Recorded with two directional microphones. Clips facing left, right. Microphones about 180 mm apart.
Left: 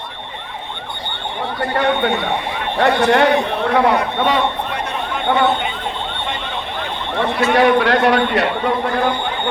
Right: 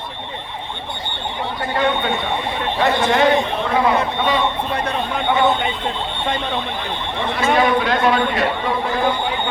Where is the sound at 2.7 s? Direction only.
65° left (ahead or behind).